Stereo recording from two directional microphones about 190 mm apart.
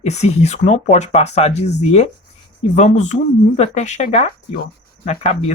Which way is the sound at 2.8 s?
35° left (ahead or behind).